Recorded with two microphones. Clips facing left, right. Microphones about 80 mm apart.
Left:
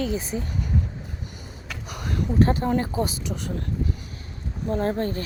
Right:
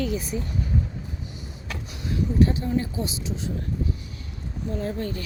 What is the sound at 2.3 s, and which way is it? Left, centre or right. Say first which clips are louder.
Speech: left 2 dB; left.